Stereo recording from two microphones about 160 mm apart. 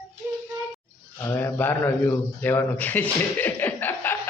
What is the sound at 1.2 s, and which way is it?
Speech, 15° left (ahead or behind).